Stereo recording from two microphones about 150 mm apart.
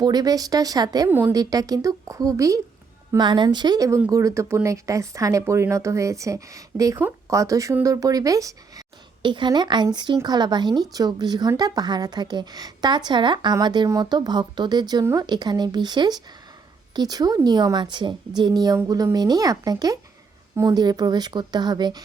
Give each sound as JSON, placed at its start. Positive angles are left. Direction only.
{"t": 0.0, "sound": "a woman's voice", "side_deg": -25}